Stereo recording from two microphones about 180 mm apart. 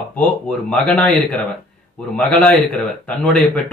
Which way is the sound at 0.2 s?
5° left (ahead or behind).